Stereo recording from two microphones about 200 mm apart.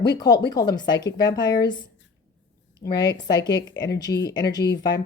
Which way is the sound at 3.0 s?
20° left (ahead or behind).